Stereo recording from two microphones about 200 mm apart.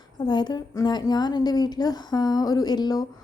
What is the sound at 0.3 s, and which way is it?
A woman's voice, 20° left (ahead or behind).